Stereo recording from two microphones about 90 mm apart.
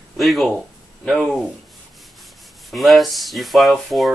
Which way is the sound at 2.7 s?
Centre (ahead or behind).